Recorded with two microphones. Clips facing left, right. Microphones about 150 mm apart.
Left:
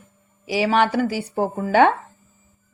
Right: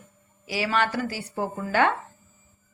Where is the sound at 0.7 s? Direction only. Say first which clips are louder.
Left 6 dB; 65° left (ahead or behind).